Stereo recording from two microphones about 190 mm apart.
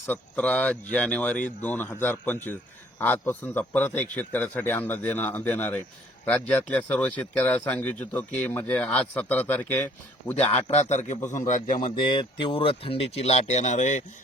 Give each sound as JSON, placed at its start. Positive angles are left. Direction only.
{"t": 0.1, "sound": "speech", "side_deg": 10}
{"t": 10.3, "sound": "a man's voice", "side_deg": 35}
{"t": 12.0, "sound": "speech", "side_deg": 25}